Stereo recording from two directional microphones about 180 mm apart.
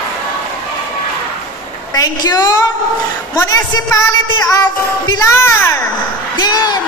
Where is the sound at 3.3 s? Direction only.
20° left (ahead or behind).